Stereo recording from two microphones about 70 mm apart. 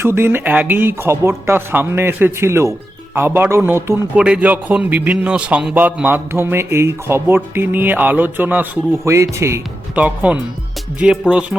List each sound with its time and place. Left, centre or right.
0.0 s speech: right
4.1 s a man's voice: centre
5.7 s speech: right
9.0 s speech: right
9.9 s a man's voice: centre